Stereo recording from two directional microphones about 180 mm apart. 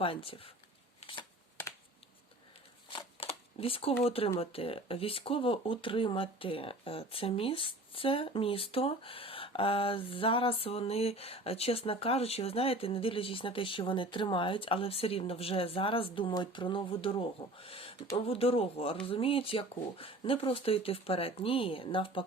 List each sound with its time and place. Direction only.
0.0 s speech: 30° left (ahead or behind)
2.9 s a sound: 30° left (ahead or behind)
4.0 s speech: 30° left (ahead or behind)